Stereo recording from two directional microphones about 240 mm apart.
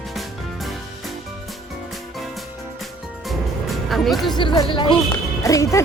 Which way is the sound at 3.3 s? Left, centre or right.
Centre.